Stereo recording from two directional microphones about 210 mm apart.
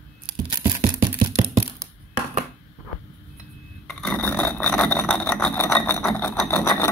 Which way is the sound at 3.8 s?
Centre (ahead or behind).